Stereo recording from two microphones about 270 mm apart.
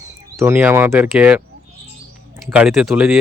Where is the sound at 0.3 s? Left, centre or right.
Centre.